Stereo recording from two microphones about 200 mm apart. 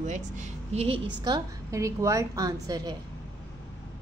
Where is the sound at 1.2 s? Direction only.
20° right (ahead or behind).